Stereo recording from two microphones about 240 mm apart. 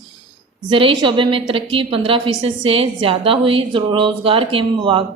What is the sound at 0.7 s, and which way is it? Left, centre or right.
A woman's voice, right.